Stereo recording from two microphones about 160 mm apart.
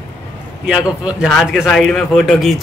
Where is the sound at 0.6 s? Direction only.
5° right (ahead or behind).